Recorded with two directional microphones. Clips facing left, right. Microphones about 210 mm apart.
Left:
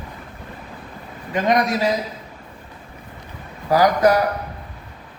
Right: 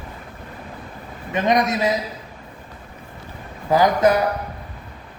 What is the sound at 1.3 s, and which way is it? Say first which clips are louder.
Speech: even; 20° right (ahead or behind).